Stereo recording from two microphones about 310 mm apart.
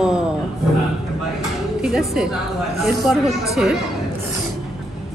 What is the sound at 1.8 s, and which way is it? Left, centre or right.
A woman's voice, centre.